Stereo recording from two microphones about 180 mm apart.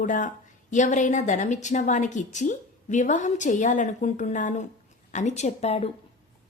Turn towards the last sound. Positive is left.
turn(degrees=35)  # may be behind; listen again after turning